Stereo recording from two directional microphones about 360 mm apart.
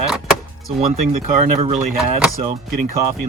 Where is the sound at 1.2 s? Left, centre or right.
Centre.